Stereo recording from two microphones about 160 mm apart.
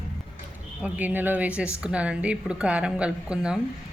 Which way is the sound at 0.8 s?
10° right (ahead or behind).